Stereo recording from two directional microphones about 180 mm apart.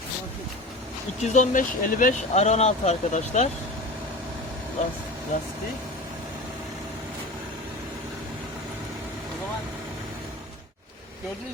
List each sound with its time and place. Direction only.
1.2 s speech: 40° left (ahead or behind)